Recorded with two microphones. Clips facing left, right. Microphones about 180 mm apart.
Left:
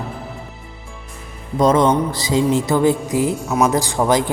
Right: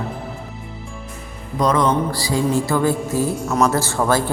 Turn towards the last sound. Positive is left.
turn(degrees=20)  # may be behind; listen again after turning